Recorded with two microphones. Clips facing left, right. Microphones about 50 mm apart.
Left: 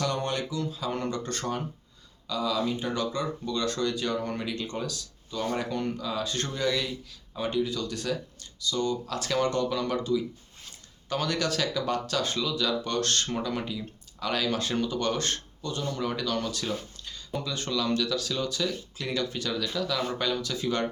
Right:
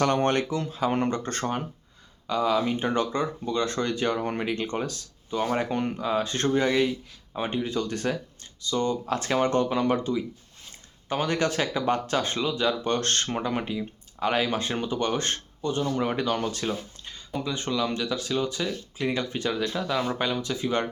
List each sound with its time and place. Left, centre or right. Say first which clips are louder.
0.0 s speech: right 6 dB; right
16.6 s a sound: right 2 dB; right
17.4 s speech: right 3 dB; right